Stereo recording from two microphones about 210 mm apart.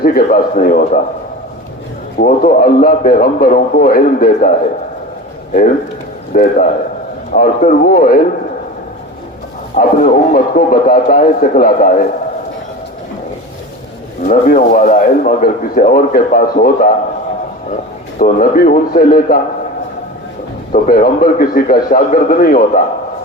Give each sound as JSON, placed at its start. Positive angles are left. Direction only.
{"t": 0.0, "sound": "speech", "side_deg": 45}
{"t": 2.1, "sound": "a man's voice", "side_deg": 45}
{"t": 6.3, "sound": "a man's voice", "side_deg": 40}
{"t": 9.7, "sound": "a man's voice", "side_deg": 40}
{"t": 14.3, "sound": "speech", "side_deg": 40}
{"t": 18.2, "sound": "a man's voice", "side_deg": 35}
{"t": 20.7, "sound": "a man's voice", "side_deg": 40}